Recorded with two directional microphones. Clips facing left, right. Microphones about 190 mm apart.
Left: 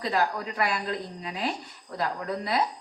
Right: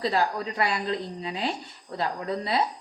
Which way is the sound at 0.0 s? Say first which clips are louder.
Right 2 dB; 30° right (ahead or behind).